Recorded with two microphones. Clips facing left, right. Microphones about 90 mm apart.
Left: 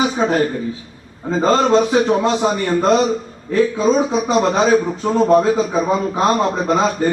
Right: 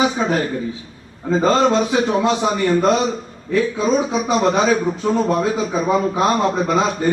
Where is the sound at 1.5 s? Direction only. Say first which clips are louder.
Left 2 dB; 35° left (ahead or behind).